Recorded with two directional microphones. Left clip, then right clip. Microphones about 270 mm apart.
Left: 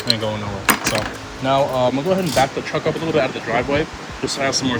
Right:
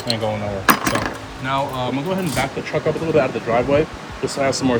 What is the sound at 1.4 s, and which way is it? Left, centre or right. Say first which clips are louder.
Speech: left 5 dB; centre.